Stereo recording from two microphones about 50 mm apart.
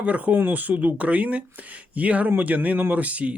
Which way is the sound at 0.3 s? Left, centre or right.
Right.